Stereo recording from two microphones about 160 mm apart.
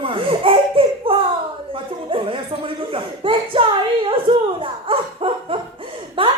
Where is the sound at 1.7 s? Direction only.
35° right (ahead or behind).